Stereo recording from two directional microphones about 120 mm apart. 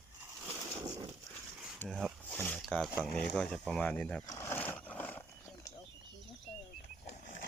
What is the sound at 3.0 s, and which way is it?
Speech, 10° left (ahead or behind).